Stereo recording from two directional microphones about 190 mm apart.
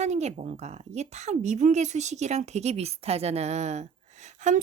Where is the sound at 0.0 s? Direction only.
35° right (ahead or behind).